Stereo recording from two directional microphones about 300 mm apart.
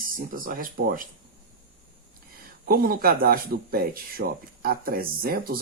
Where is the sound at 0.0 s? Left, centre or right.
Right.